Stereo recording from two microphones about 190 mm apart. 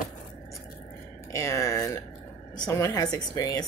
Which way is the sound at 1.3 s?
15° left (ahead or behind).